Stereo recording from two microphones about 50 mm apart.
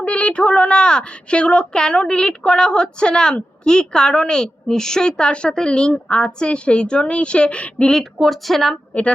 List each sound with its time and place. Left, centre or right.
0.0 s a woman's voice: left
8.2 s a woman's voice: centre